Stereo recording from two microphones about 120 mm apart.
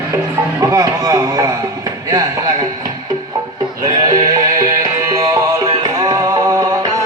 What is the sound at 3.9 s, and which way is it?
Music, 30° right (ahead or behind).